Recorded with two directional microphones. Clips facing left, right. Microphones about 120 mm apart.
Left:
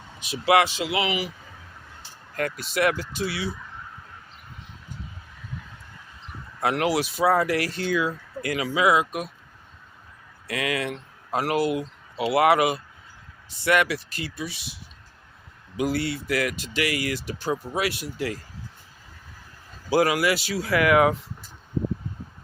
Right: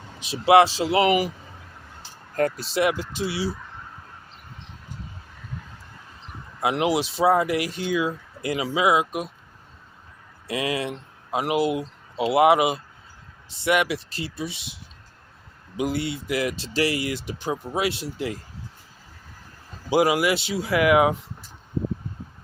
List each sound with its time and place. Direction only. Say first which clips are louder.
0.2 s speech: right 4 dB; 25° right (ahead or behind); by 1.3 s 45° right (ahead or behind)
2.3 s speech: right 4 dB; 35° right (ahead or behind)
6.6 s speech: right 1 dB; 15° right (ahead or behind)
10.4 s speech: right 1 dB; 25° right (ahead or behind)
15.8 s speech: left 1 dB; 20° right (ahead or behind)
19.9 s speech: right 1 dB; 20° right (ahead or behind)